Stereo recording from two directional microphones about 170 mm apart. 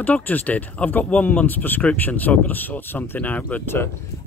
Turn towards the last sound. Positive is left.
turn(degrees=15)  # may be behind; listen again after turning